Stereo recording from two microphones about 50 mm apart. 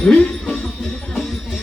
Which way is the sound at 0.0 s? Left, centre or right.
Centre.